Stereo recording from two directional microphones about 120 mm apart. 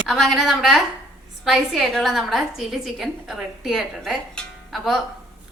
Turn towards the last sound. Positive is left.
turn(degrees=0)  # may be behind; listen again after turning